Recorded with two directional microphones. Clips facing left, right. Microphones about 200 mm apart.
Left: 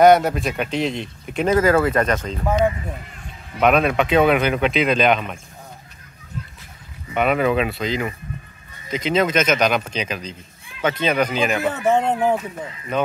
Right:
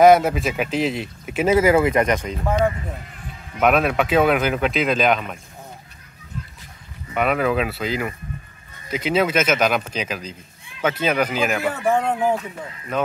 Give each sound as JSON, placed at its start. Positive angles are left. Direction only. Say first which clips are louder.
{"t": 0.0, "sound": "speech", "louder": "even", "side_deg": 0}
{"t": 3.5, "sound": "speech", "louder": "left 1 dB", "side_deg": -5}
{"t": 7.2, "sound": "speech", "louder": "left 2 dB", "side_deg": 0}
{"t": 11.6, "sound": "speech", "louder": "left 2 dB", "side_deg": 20}
{"t": 12.9, "sound": "speech", "louder": "left 1 dB", "side_deg": 0}